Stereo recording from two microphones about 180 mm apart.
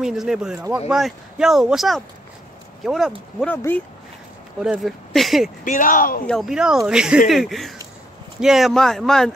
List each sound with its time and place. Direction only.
0.0 s speech: 5° right (ahead or behind)
3.3 s speech: 10° left (ahead or behind)
4.6 s speech: centre (ahead or behind)
5.6 s speech: 45° left (ahead or behind)
6.2 s speech: centre (ahead or behind)